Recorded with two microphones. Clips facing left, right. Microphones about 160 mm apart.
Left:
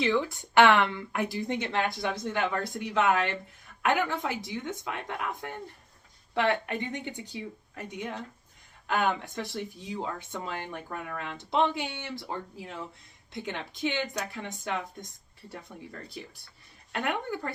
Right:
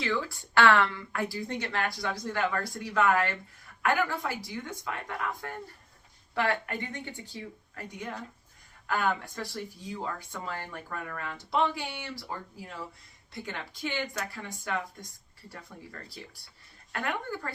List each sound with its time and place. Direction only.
0.0 s speech: 20° left (ahead or behind)